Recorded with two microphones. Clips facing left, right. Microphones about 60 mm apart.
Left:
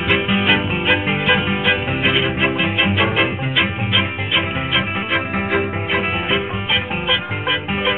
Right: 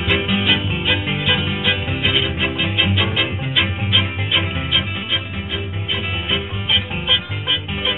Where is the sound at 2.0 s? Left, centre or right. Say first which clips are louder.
Left 3 dB; left.